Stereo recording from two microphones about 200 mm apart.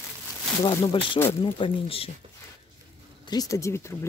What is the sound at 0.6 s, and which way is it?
Speech, 15° left (ahead or behind).